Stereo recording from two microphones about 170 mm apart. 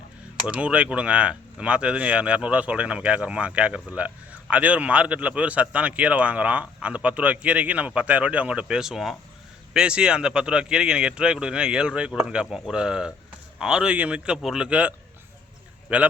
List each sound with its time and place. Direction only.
0.4 s speech: 5° right (ahead or behind)